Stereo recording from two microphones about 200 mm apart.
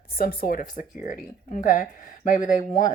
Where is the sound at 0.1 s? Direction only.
45° left (ahead or behind).